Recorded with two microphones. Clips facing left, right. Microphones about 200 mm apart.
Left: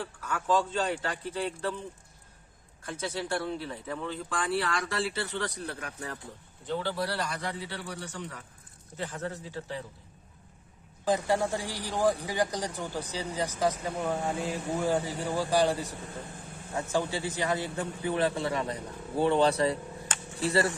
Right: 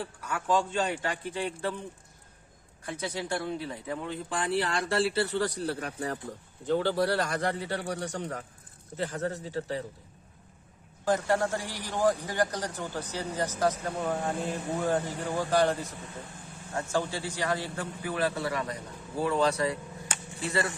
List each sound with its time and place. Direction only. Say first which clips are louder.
0.0 s a man's voice: even; 15° right (ahead or behind)
2.8 s speech: even; 15° right (ahead or behind); by 6.1 s 35° right (ahead or behind)
6.7 s a man's voice: right 5 dB; 50° right (ahead or behind)
11.0 s speech: even; 15° left (ahead or behind)
16.9 s a man's voice: left 1 dB; 15° left (ahead or behind); by 19.8 s 30° left (ahead or behind)